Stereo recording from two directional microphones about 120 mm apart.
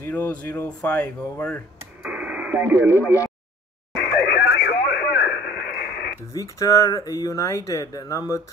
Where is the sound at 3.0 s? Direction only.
25° left (ahead or behind).